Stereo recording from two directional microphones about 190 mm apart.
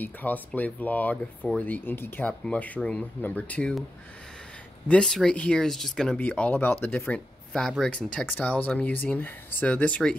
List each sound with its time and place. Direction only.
0.0 s speech: 10° left (ahead or behind)
4.8 s speech: 5° left (ahead or behind)